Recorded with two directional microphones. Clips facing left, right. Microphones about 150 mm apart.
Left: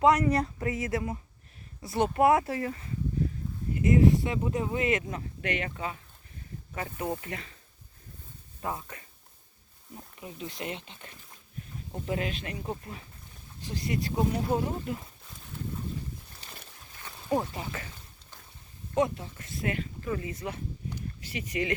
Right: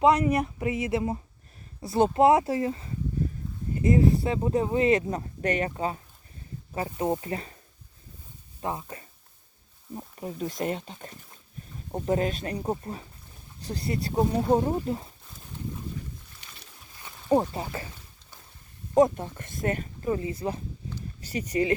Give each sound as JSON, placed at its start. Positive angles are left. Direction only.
{"t": 0.0, "sound": "speech", "side_deg": -15}
{"t": 6.8, "sound": "speech", "side_deg": -25}
{"t": 8.6, "sound": "speech", "side_deg": -25}
{"t": 9.9, "sound": "speech", "side_deg": -40}
{"t": 17.2, "sound": "speech", "side_deg": -35}
{"t": 18.9, "sound": "speech", "side_deg": -45}
{"t": 19.6, "sound": "speech", "side_deg": -40}
{"t": 20.1, "sound": "speech", "side_deg": -30}